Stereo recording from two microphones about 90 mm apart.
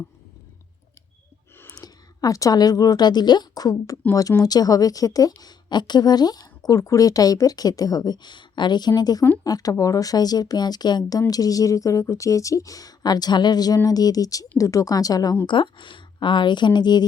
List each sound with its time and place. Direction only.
1.6 s a woman's voice: 40° left (ahead or behind)
15.4 s speech: 65° left (ahead or behind)